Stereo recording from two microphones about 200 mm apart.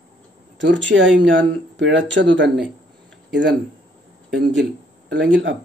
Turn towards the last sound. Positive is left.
turn(degrees=-65)  # may be behind; listen again after turning